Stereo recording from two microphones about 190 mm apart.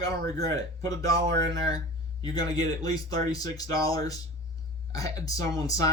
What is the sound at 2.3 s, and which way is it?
Speech, 20° left (ahead or behind).